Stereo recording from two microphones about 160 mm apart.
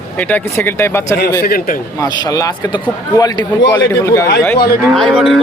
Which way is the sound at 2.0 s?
20° left (ahead or behind).